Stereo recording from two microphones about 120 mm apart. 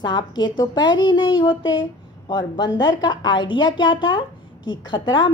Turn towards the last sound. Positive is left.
turn(degrees=40)  # may be behind; listen again after turning